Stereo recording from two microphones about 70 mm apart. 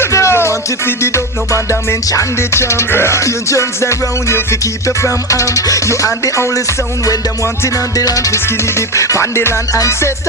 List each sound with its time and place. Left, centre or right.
0.1 s music: left
7.9 s music: left